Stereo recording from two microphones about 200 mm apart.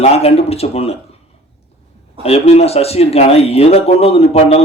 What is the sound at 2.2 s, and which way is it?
Speech, 30° left (ahead or behind).